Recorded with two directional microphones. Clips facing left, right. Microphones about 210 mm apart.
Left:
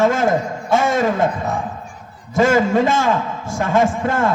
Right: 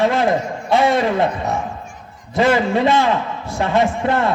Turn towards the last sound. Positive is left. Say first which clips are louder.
# even
turn(degrees=45)  # may be behind; listen again after turning